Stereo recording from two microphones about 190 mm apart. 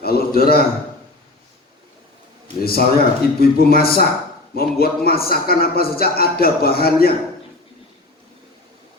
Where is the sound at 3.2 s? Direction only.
55° left (ahead or behind).